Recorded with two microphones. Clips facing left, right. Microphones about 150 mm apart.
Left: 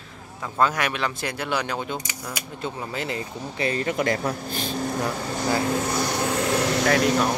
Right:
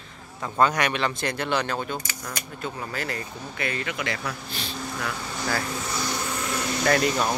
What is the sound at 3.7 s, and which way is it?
Speech, 40° left (ahead or behind).